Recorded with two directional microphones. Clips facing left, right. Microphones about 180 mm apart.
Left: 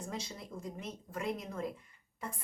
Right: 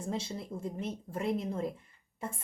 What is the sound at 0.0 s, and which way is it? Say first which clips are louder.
Speech: right 6 dB; 25° right (ahead or behind).